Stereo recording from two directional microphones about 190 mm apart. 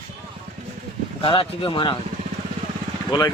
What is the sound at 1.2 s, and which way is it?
Speech, 25° left (ahead or behind).